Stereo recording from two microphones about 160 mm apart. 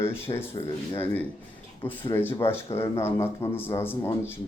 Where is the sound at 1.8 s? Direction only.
15° left (ahead or behind).